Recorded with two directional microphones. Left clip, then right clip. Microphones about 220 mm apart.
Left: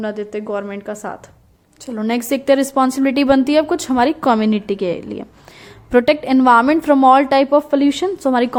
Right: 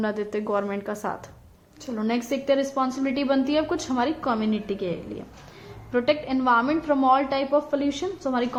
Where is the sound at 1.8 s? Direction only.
30° left (ahead or behind).